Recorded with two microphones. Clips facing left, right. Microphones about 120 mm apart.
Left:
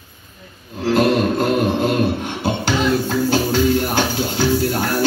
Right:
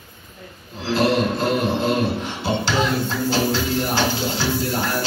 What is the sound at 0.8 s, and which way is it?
Music, 50° left (ahead or behind).